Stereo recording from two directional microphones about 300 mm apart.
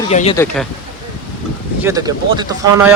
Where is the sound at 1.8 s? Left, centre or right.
Centre.